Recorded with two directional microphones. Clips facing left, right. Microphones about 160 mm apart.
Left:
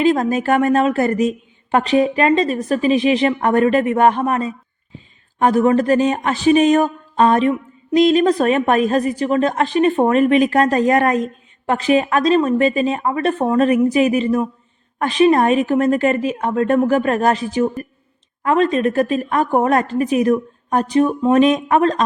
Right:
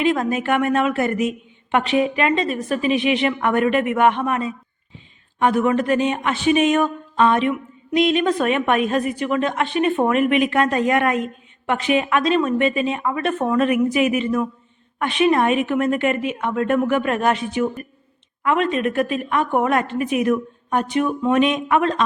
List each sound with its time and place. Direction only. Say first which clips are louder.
0.0 s speech: left 4 dB; 35° left (ahead or behind)